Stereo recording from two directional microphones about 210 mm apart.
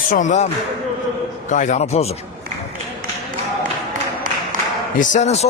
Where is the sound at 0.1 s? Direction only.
35° left (ahead or behind).